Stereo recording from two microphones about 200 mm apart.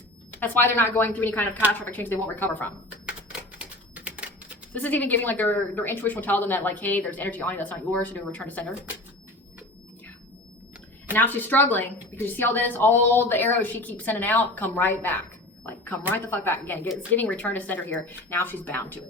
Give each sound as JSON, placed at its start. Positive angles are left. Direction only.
{"t": 0.3, "sound": "speech", "side_deg": 10}
{"t": 3.6, "sound": "typing", "side_deg": -5}
{"t": 4.7, "sound": "speech", "side_deg": 10}
{"t": 11.1, "sound": "speech", "side_deg": 10}
{"t": 15.6, "sound": "a sound", "side_deg": 10}
{"t": 16.1, "sound": "speech", "side_deg": 10}